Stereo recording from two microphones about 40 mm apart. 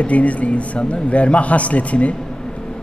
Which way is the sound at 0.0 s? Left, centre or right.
Left.